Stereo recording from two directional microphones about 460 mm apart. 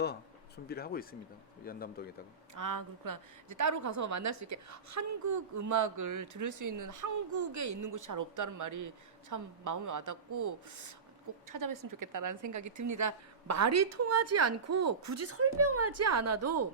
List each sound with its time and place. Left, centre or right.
0.0 s speech: left
2.6 s a woman's voice: right